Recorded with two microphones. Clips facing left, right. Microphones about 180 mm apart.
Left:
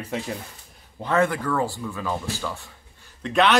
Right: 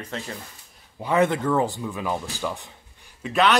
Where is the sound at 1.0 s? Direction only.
15° right (ahead or behind).